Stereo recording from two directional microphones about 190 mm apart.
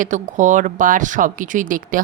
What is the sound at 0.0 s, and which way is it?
Speech, 40° right (ahead or behind).